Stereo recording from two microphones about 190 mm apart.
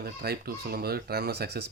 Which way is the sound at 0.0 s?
55° right (ahead or behind).